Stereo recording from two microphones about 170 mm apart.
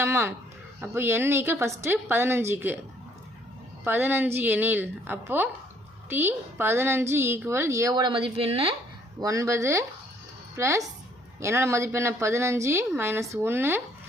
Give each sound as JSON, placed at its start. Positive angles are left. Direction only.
{"t": 0.0, "sound": "a woman's voice", "side_deg": -15}
{"t": 3.8, "sound": "a woman's voice", "side_deg": -10}
{"t": 9.2, "sound": "a woman's voice", "side_deg": -20}